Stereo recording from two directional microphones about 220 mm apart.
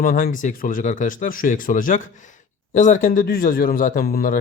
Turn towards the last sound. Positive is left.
turn(degrees=40)  # may be behind; listen again after turning